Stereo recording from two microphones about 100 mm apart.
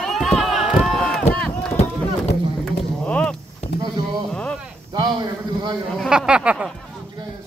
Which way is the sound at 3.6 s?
90° left.